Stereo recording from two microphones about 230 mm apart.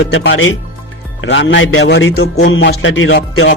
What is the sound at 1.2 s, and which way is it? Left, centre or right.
Music, left.